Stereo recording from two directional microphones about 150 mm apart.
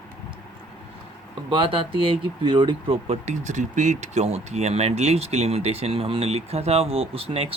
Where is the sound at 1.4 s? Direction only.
35° right (ahead or behind).